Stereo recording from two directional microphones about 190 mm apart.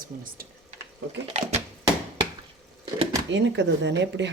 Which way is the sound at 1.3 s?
35° right (ahead or behind).